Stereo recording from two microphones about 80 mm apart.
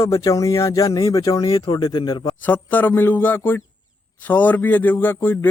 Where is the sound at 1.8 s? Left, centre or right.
Left.